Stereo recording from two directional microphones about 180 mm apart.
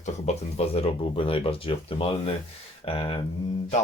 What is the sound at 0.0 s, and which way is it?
Speech, 35° left (ahead or behind).